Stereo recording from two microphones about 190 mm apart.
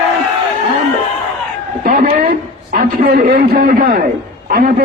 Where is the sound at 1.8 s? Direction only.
50° right (ahead or behind).